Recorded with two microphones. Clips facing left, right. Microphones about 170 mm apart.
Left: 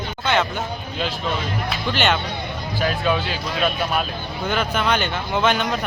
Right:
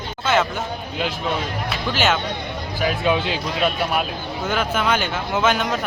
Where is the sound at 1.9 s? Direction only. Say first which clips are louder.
Right 1 dB; 5° right (ahead or behind).